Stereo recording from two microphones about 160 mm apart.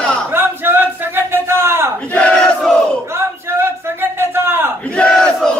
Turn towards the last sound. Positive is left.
turn(degrees=5)  # may be behind; listen again after turning